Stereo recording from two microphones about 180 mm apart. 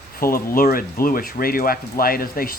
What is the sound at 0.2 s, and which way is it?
Speech, 50° left (ahead or behind).